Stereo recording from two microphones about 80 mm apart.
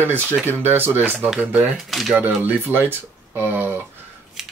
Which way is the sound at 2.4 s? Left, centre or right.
Right.